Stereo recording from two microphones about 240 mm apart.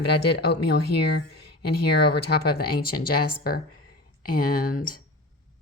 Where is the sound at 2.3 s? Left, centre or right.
Left.